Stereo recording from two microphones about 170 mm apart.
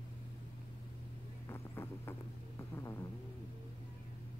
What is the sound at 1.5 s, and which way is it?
Vehicle, 15° left (ahead or behind).